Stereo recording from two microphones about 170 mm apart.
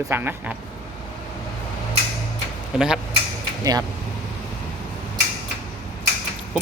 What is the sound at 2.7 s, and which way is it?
Speech, 5° right (ahead or behind).